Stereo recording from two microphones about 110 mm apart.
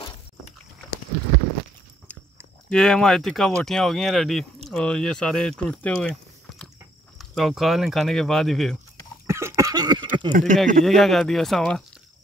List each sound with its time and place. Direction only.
2.7 s speech: 5° left (ahead or behind)
7.2 s speech: centre (ahead or behind)
9.3 s cough: 20° right (ahead or behind)
9.7 s a sound: 40° right (ahead or behind)
10.4 s speech: 5° left (ahead or behind)